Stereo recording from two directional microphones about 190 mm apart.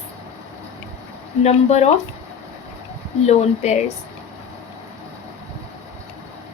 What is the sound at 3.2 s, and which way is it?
Speech, 35° left (ahead or behind).